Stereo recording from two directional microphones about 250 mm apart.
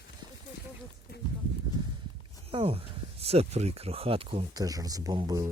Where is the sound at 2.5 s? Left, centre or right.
Right.